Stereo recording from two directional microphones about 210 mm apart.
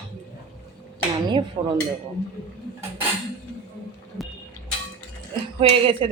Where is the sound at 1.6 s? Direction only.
20° right (ahead or behind).